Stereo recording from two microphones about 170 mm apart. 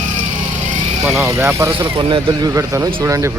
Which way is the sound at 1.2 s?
15° right (ahead or behind).